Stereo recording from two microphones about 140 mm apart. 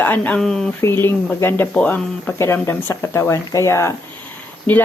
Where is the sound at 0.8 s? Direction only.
15° left (ahead or behind).